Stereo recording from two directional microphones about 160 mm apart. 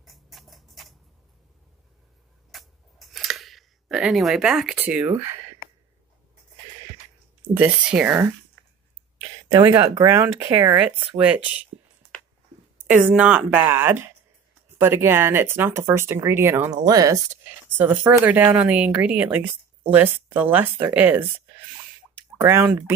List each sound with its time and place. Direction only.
0.0 s rodents: centre (ahead or behind)
2.5 s scissors: centre (ahead or behind)
7.5 s speech: 10° right (ahead or behind)
9.5 s speech: 15° right (ahead or behind)
12.7 s speech: 10° right (ahead or behind)
17.7 s speech: 10° right (ahead or behind)